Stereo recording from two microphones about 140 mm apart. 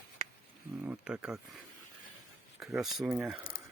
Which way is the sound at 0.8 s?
10° right (ahead or behind).